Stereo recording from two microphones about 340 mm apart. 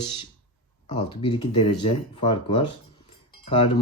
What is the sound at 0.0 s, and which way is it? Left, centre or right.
Speech, centre.